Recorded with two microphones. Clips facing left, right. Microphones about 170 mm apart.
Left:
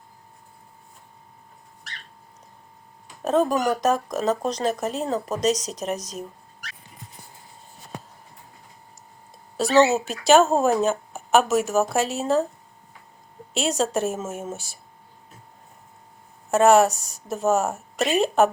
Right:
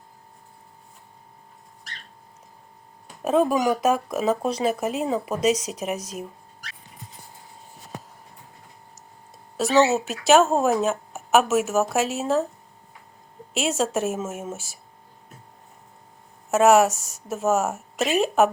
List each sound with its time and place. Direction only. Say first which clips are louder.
3.2 s speech: right 1 dB; 5° right (ahead or behind)
9.6 s speech: left 1 dB; 5° right (ahead or behind)
13.5 s speech: even; 5° right (ahead or behind)
16.5 s speech: even; 5° right (ahead or behind)
16.9 s speech: right 1 dB; 35° left (ahead or behind)
17.2 s speech: left 1 dB; 5° right (ahead or behind)